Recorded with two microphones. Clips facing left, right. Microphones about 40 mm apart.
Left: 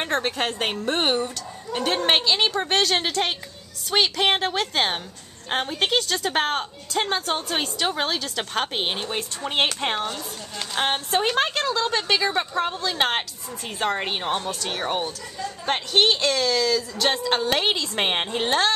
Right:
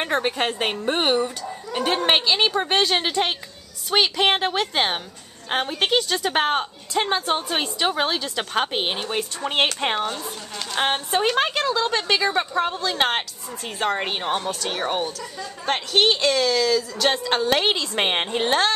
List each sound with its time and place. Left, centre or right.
0.0 s a woman's voice: centre